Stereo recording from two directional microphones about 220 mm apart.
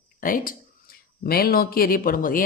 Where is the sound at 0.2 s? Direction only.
40° left (ahead or behind).